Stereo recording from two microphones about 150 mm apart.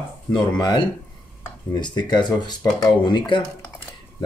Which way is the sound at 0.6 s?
25° left (ahead or behind).